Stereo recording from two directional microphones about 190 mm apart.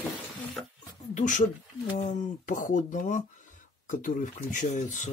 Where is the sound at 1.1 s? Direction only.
40° left (ahead or behind).